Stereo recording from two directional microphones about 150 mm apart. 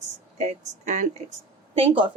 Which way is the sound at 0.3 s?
50° right (ahead or behind).